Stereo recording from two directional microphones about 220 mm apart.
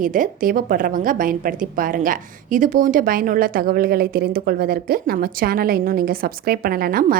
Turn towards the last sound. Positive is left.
turn(degrees=-40)  # may be behind; listen again after turning